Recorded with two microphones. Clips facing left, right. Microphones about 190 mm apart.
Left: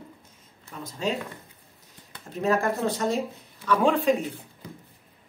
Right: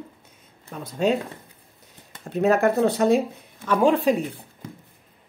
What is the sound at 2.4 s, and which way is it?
Speech, 65° right (ahead or behind).